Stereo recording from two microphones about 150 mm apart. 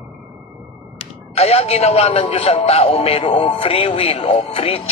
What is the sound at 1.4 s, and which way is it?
A man's voice, 45° left (ahead or behind).